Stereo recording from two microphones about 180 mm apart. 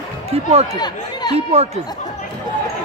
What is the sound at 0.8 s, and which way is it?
Speech, 25° left (ahead or behind).